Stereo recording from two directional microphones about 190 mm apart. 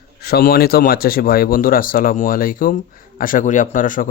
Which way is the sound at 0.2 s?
55° left (ahead or behind).